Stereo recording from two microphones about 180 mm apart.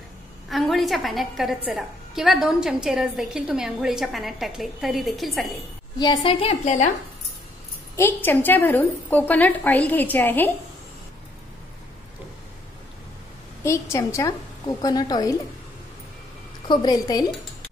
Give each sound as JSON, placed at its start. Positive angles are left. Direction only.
{"t": 0.5, "sound": "a woman's voice", "side_deg": 0}
{"t": 5.9, "sound": "a woman's voice", "side_deg": 25}
{"t": 7.9, "sound": "a woman's voice", "side_deg": 15}
{"t": 13.9, "sound": "a woman's voice", "side_deg": 20}
{"t": 16.6, "sound": "a woman's voice", "side_deg": 25}